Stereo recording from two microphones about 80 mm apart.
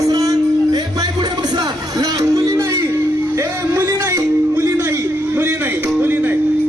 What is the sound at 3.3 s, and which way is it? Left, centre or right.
Music, right.